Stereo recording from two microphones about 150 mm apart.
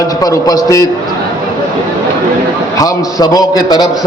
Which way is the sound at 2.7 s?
25° left (ahead or behind).